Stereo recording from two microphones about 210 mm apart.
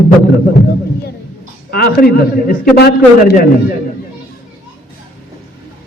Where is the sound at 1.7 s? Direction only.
50° left (ahead or behind).